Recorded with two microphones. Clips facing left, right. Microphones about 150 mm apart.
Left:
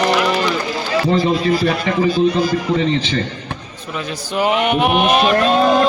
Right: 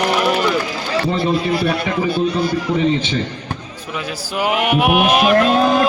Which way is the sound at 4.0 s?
5° right (ahead or behind).